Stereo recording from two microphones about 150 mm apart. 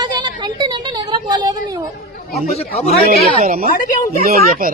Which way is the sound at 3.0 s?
90° right.